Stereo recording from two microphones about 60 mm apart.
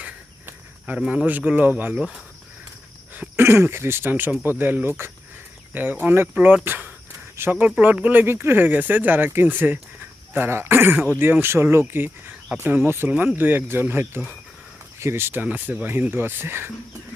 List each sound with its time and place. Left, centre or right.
0.9 s speech: centre
3.3 s speech: right
4.4 s speech: right
7.3 s speech: right
7.6 s speech: right
10.9 s speech: right
11.2 s speech: right
13.1 s speech: right
15.4 s speech: right